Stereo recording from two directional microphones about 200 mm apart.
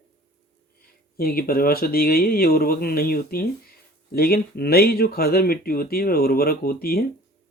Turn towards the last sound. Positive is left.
turn(degrees=50)  # may be behind; listen again after turning